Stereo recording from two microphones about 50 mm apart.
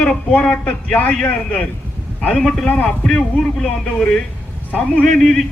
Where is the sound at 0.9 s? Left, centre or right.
Left.